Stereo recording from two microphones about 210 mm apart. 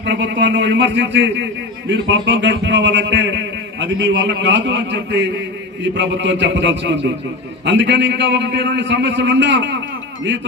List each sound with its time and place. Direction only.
0.0 s a man's voice: 60° right (ahead or behind)